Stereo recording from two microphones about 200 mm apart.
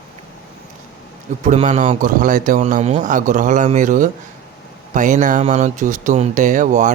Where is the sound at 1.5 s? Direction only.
35° right (ahead or behind).